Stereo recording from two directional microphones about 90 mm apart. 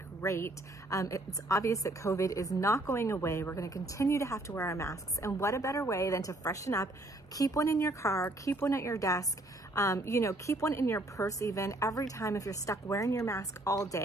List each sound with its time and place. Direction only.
0.2 s a woman's voice: 35° left (ahead or behind)